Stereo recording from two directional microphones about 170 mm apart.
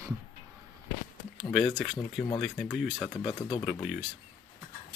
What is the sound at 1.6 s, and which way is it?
Speech, 5° left (ahead or behind).